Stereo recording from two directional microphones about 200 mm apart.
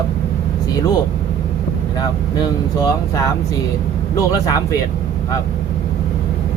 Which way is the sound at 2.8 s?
15° left (ahead or behind).